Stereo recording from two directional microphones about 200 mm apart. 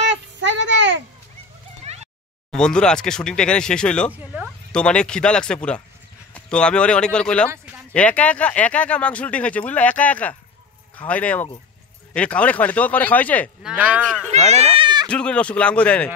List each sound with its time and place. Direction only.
0.0 s child singing: 60° right (ahead or behind)
1.9 s a sound: 30° right (ahead or behind)
2.5 s speech: 5° left (ahead or behind)
4.1 s speech: 5° right (ahead or behind)
4.7 s speech: 5° left (ahead or behind)
13.6 s speech: 5° right (ahead or behind)
14.3 s a sound: 30° right (ahead or behind)
15.0 s speech: 5° left (ahead or behind)